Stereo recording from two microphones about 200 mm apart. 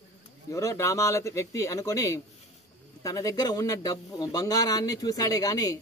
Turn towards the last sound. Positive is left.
turn(degrees=15)  # may be behind; listen again after turning